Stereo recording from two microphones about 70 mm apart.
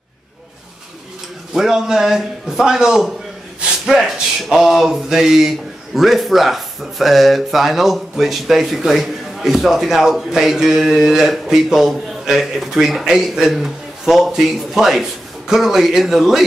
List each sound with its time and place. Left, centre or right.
1.5 s a man's voice: centre